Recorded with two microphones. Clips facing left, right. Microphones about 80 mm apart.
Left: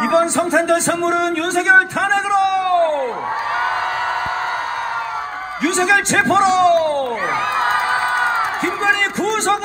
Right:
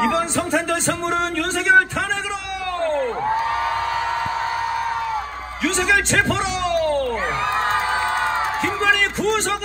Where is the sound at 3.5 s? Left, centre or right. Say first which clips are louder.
Left 2 dB; left.